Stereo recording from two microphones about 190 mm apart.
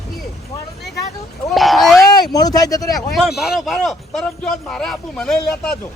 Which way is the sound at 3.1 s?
Centre (ahead or behind).